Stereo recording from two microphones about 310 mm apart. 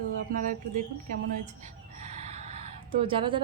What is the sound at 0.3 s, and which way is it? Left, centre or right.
Speech, right.